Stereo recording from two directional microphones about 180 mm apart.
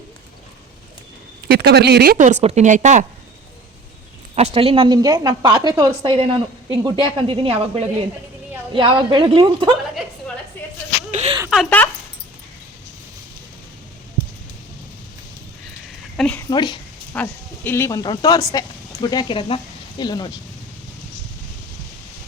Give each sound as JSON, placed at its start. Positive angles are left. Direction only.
{"t": 1.5, "sound": "speech", "side_deg": -65}
{"t": 2.1, "sound": "a woman's voice", "side_deg": -40}
{"t": 4.4, "sound": "a woman's voice", "side_deg": -35}
{"t": 11.1, "sound": "a sound", "side_deg": -35}
{"t": 11.5, "sound": "speech", "side_deg": 5}
{"t": 16.1, "sound": "a woman's voice", "side_deg": 5}
{"t": 16.5, "sound": "speech", "side_deg": 25}
{"t": 17.2, "sound": "speech", "side_deg": 10}